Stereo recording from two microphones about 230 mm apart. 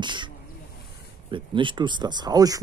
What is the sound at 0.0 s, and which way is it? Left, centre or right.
Snake, centre.